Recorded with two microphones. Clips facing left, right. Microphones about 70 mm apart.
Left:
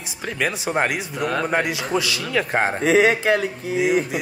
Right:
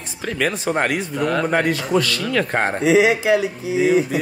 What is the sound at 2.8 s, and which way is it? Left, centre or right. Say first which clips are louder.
Speech: right 2 dB; left.